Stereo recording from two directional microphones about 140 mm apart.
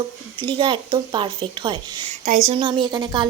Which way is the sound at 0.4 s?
35° right (ahead or behind).